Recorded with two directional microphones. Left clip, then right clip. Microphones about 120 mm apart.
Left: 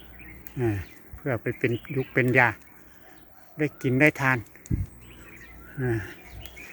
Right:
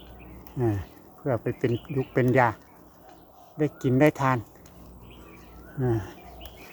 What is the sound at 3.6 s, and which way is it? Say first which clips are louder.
Speech: even; 20° left (ahead or behind).